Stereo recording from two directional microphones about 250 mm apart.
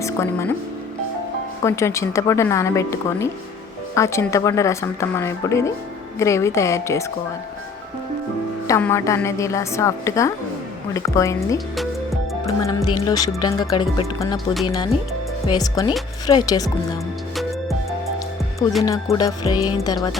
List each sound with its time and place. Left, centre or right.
0.0 s speech: centre
1.6 s speech: centre
8.6 s speech: centre
14.3 s speech: centre
15.4 s speech: centre
18.8 s speech: centre